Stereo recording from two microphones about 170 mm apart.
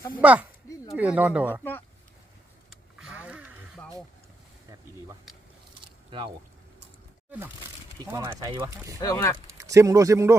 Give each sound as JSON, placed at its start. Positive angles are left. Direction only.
{"t": 0.2, "sound": "speech", "side_deg": -10}
{"t": 2.6, "sound": "vehicle", "side_deg": -5}
{"t": 5.8, "sound": "a sound", "side_deg": -30}
{"t": 7.3, "sound": "a sound", "side_deg": -10}
{"t": 7.9, "sound": "speech", "side_deg": -20}
{"t": 9.0, "sound": "speech", "side_deg": 20}
{"t": 9.6, "sound": "speech", "side_deg": -20}